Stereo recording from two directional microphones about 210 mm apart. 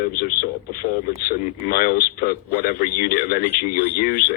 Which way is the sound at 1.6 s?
45° left (ahead or behind).